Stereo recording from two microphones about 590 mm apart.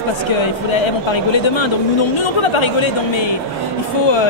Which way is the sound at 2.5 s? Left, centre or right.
Left.